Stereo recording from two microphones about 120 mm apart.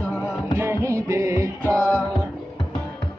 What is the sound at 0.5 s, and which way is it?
Music, 25° right (ahead or behind).